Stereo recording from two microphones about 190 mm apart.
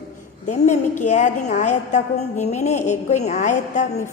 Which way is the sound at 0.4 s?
40° left (ahead or behind).